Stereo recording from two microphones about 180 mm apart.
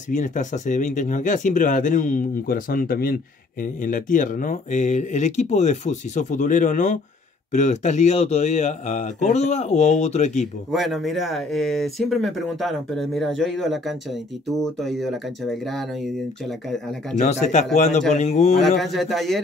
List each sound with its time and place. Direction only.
0.1 s speech: 45° left (ahead or behind)
10.7 s speech: centre (ahead or behind)
17.2 s speech: 40° left (ahead or behind)
18.8 s speech: centre (ahead or behind)